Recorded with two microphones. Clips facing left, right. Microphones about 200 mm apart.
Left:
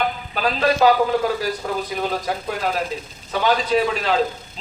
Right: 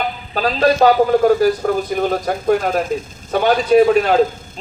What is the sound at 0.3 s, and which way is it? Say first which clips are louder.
A man's voice: right 5 dB; 35° right (ahead or behind).